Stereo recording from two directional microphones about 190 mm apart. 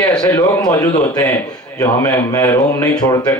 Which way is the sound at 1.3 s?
15° left (ahead or behind).